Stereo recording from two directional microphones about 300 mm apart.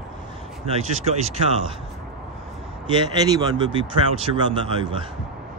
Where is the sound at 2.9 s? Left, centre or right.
Centre.